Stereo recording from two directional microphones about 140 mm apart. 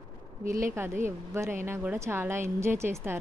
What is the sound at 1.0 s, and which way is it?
Speech, 20° right (ahead or behind).